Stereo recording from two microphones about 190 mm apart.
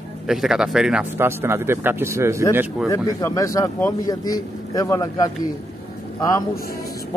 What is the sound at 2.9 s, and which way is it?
Speech, 15° left (ahead or behind).